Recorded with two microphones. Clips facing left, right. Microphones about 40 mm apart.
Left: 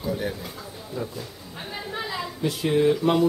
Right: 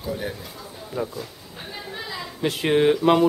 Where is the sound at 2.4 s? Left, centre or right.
Right.